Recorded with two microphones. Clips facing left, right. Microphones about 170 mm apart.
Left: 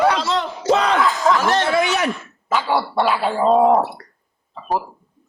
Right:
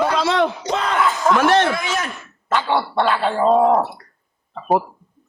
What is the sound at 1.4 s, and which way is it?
Speech, 60° right (ahead or behind).